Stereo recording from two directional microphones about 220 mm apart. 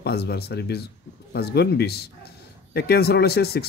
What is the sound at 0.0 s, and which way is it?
Speech, 45° left (ahead or behind).